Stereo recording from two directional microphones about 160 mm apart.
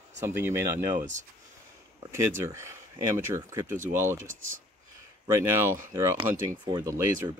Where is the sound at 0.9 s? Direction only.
50° right (ahead or behind).